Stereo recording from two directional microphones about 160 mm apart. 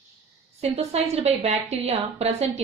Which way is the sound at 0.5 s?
40° right (ahead or behind).